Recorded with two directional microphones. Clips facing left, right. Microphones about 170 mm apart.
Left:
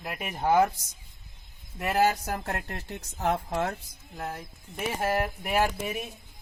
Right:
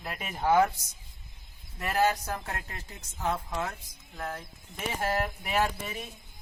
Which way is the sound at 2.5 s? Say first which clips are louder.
Left 5 dB; 60° left (ahead or behind).